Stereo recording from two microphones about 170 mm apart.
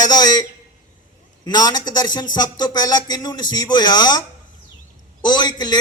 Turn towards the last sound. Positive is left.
turn(degrees=25)  # may be behind; listen again after turning